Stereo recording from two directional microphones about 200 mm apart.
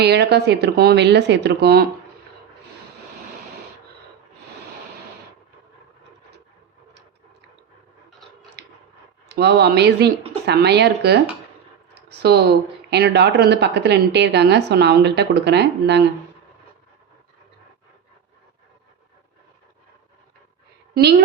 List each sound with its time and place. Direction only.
0.0 s a woman's voice: 55° right (ahead or behind)
8.6 s a sound: 55° right (ahead or behind)
9.3 s a woman's voice: 55° right (ahead or behind)
20.9 s a woman's voice: 55° right (ahead or behind)